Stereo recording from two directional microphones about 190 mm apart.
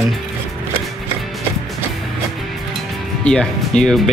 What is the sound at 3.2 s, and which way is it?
Speech, 5° left (ahead or behind).